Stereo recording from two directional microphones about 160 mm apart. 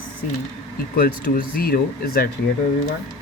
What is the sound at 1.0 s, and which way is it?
A woman's voice, 65° left (ahead or behind).